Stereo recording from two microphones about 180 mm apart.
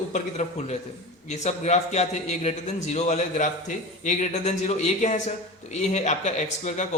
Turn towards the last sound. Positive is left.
turn(degrees=40)  # may be behind; listen again after turning